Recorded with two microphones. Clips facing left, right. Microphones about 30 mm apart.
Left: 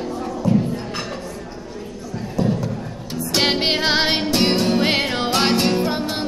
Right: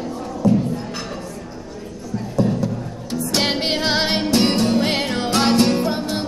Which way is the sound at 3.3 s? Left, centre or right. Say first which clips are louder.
Left 2 dB; left.